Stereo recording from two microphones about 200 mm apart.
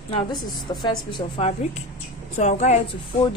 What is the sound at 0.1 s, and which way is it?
A woman's voice, 20° left (ahead or behind).